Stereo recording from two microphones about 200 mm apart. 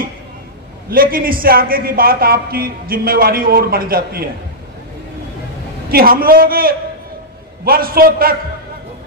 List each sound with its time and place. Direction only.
0.8 s a man's voice: 45° right (ahead or behind)
5.9 s a man's voice: 45° right (ahead or behind)